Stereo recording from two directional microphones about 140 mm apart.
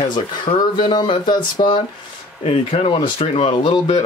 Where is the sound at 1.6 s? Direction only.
45° left (ahead or behind).